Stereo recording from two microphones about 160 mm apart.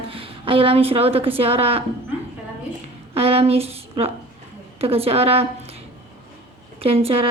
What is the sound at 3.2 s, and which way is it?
Speech, 35° right (ahead or behind).